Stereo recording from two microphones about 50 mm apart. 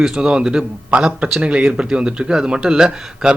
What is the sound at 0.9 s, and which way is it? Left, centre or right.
Speech, right.